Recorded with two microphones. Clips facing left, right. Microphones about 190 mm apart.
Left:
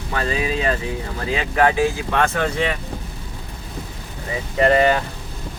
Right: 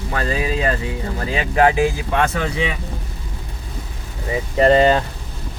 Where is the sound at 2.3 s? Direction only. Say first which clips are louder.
Left 1 dB; 5° right (ahead or behind).